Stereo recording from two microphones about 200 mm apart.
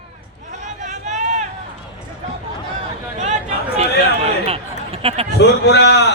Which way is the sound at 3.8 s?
30° right (ahead or behind).